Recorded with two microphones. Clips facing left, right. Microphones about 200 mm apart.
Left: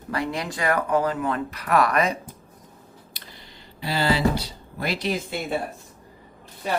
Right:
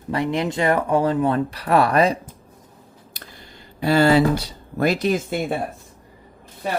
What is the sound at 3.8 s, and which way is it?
Speech, 50° right (ahead or behind).